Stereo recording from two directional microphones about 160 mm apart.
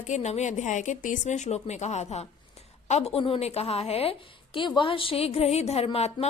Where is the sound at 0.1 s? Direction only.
45° left (ahead or behind).